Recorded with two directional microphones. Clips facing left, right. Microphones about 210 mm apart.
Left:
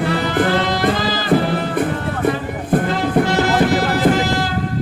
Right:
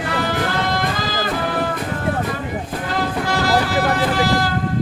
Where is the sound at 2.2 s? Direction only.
55° left (ahead or behind).